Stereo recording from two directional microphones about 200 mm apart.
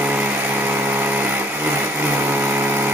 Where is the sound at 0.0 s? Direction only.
10° right (ahead or behind).